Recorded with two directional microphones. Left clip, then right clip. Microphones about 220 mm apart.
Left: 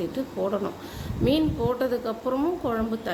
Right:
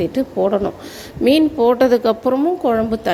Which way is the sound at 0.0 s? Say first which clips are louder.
Right 10 dB; 30° right (ahead or behind).